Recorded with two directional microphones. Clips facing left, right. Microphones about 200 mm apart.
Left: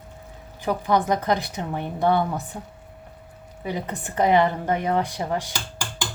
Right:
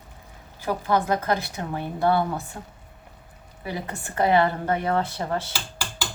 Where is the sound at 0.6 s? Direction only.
15° left (ahead or behind).